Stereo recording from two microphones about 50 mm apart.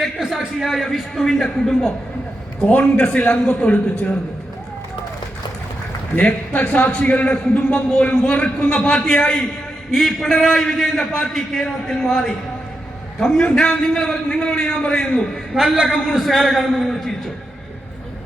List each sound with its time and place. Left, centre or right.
0.2 s a man's voice: centre
2.6 s a man's voice: left
6.1 s a man's voice: left
9.9 s a man's voice: centre
13.8 s a man's voice: centre
15.5 s a man's voice: centre